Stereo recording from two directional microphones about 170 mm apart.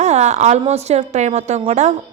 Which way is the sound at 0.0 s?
40° right (ahead or behind).